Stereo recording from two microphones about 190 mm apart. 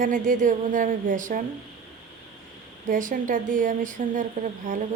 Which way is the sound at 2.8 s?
45° right (ahead or behind).